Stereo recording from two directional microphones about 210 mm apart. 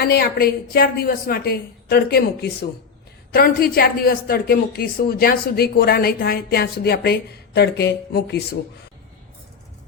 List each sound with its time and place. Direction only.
0.0 s a woman's voice: 45° left (ahead or behind)